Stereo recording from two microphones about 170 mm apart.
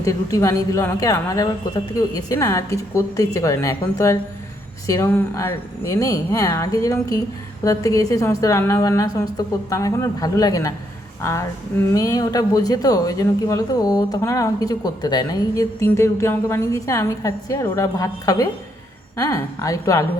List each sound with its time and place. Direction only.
0.0 s speech: 20° left (ahead or behind)